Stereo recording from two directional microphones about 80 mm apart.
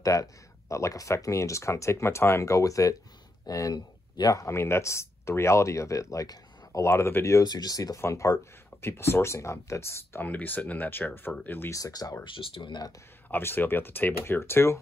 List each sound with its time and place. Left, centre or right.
0.0 s speech: left
7.4 s speech: left
8.0 s speech: left
10.2 s speech: left
11.7 s speech: left
12.4 s speech: left
13.3 s speech: left